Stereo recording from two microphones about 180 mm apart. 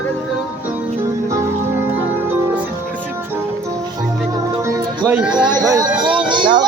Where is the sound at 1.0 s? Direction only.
15° right (ahead or behind).